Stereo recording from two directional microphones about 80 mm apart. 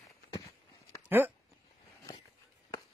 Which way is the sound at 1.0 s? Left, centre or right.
Right.